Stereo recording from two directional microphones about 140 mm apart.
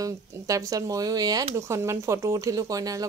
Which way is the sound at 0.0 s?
25° right (ahead or behind).